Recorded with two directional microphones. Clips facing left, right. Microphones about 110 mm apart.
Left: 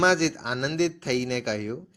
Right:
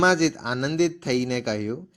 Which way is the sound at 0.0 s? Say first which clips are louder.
Right 2 dB; 20° right (ahead or behind).